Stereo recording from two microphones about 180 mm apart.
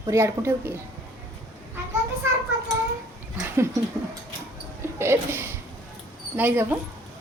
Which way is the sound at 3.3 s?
15° right (ahead or behind).